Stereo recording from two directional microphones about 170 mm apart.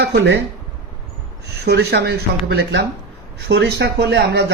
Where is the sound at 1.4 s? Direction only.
70° right (ahead or behind).